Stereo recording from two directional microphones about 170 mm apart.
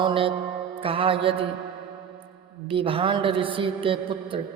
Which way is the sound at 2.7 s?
30° right (ahead or behind).